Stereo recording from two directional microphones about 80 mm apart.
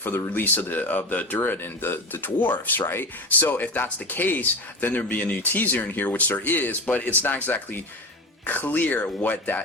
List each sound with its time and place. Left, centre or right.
0.0 s speech: left